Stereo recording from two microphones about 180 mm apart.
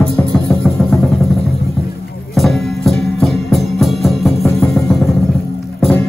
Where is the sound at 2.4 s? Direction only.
Centre (ahead or behind).